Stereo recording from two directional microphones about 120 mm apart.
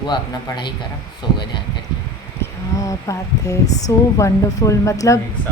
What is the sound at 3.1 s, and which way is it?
Speech, 25° left (ahead or behind).